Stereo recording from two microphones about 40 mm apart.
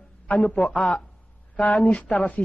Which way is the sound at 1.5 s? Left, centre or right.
Left.